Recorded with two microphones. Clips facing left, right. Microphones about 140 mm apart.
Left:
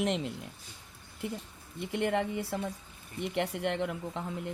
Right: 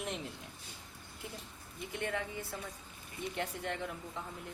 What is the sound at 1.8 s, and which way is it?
Speech, 70° left (ahead or behind).